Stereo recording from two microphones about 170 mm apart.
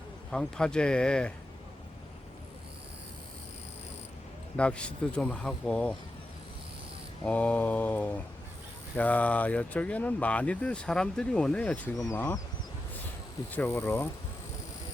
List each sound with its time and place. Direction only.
0.3 s speech: 5° left (ahead or behind)
4.5 s speech: 5° left (ahead or behind)
7.3 s speech: 10° left (ahead or behind)
13.6 s speech: 10° left (ahead or behind)